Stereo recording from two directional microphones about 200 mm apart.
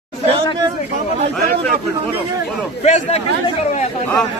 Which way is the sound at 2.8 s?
35° left (ahead or behind).